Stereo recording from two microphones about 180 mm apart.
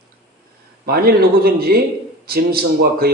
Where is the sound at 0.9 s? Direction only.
55° right (ahead or behind).